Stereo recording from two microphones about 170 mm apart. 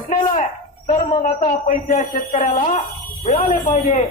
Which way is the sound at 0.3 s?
50° left (ahead or behind).